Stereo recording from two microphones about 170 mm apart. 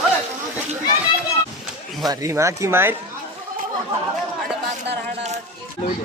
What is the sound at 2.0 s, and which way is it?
Speech, 20° right (ahead or behind).